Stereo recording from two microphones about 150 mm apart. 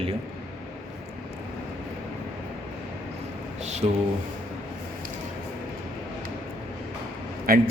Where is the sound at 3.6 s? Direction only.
50° right (ahead or behind).